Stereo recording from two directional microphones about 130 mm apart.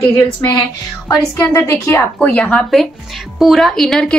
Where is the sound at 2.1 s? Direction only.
10° left (ahead or behind).